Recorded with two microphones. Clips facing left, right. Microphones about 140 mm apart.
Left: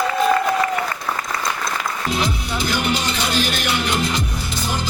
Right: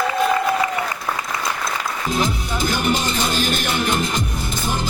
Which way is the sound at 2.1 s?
45° right (ahead or behind).